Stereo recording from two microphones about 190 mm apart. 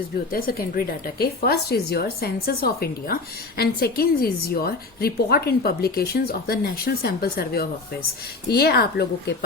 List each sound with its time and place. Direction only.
0.3 s a woman's voice: 50° left (ahead or behind)